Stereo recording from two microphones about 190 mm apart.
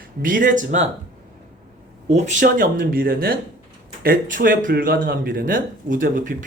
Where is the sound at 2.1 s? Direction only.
35° right (ahead or behind).